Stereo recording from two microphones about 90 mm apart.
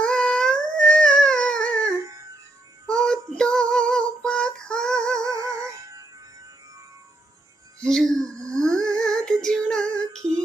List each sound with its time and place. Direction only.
0.0 s dog: 10° left (ahead or behind)
2.0 s music: 40° right (ahead or behind)
3.0 s female singing: 10° left (ahead or behind)
5.2 s music: 35° right (ahead or behind)
7.8 s speech: 5° left (ahead or behind)
8.4 s a sound: 40° right (ahead or behind)
8.6 s humming: 5° left (ahead or behind)
9.0 s female singing: 10° left (ahead or behind)
10.2 s female singing: 35° right (ahead or behind)